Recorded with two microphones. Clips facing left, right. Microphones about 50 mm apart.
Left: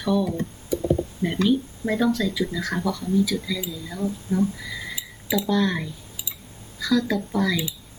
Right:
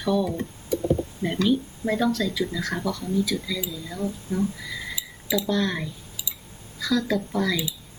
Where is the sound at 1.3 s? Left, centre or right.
Centre.